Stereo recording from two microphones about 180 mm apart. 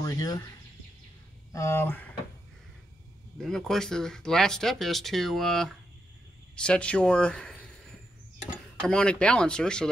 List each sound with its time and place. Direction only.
0.0 s speech: 20° left (ahead or behind)
1.5 s speech: 15° left (ahead or behind)
3.3 s speech: centre (ahead or behind)
8.8 s speech: 5° left (ahead or behind)